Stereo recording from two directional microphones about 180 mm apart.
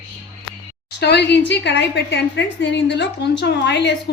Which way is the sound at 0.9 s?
65° left (ahead or behind).